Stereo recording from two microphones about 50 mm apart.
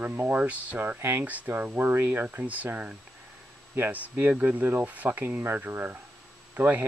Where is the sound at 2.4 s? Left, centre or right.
Right.